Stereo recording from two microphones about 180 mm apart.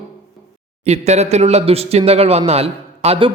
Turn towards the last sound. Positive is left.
turn(degrees=-30)  # may be behind; listen again after turning